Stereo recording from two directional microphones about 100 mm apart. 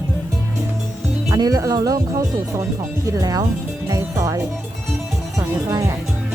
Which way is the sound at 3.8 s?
35° right (ahead or behind).